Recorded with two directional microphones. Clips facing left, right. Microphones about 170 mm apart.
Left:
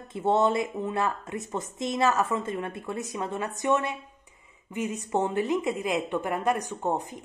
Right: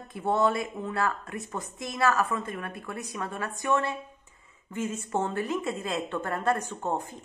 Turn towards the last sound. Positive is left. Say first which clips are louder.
# left 2 dB
turn(degrees=15)  # may be behind; listen again after turning